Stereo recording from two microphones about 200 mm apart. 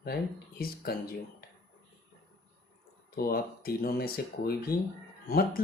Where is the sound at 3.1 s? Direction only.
50° left (ahead or behind).